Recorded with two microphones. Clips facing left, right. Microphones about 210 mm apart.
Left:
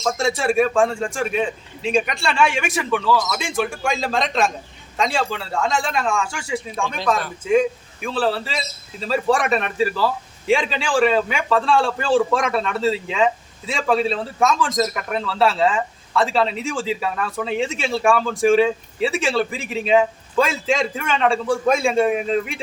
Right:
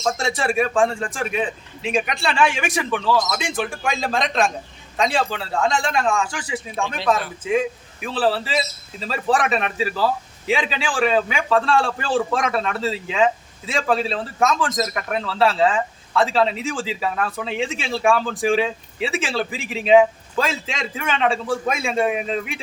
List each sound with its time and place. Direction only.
0.2 s speech: centre (ahead or behind)